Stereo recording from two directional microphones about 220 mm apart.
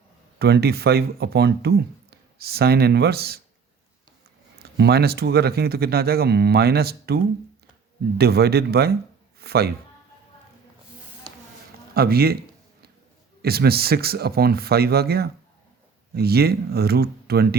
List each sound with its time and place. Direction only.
0.3 s speech: 45° right (ahead or behind)
4.6 s speech: 45° right (ahead or behind)
8.2 s a man's voice: 45° right (ahead or behind)
11.9 s speech: 45° right (ahead or behind)
13.4 s speech: 45° right (ahead or behind)